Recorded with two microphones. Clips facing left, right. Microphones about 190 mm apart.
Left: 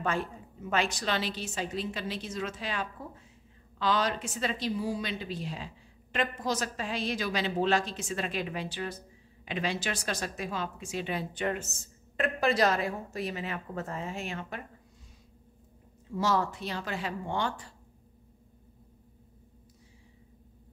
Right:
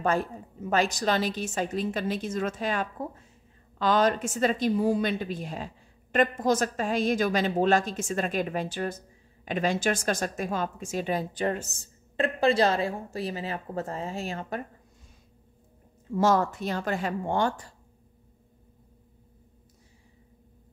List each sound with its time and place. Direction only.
0.0 s a woman's voice: 40° right (ahead or behind)
16.2 s a woman's voice: 50° right (ahead or behind)